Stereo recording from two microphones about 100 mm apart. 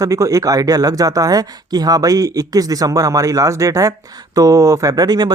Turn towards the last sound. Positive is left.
turn(degrees=-45)  # may be behind; listen again after turning